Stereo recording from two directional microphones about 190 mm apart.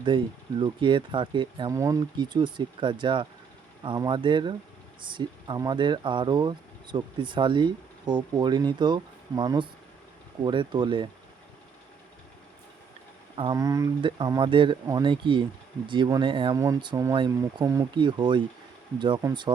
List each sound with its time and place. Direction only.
0.1 s speech: 25° right (ahead or behind)
13.3 s speech: 30° right (ahead or behind)
13.6 s speech: 15° right (ahead or behind)